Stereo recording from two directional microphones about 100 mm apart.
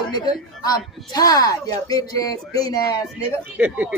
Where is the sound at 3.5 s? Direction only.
15° right (ahead or behind).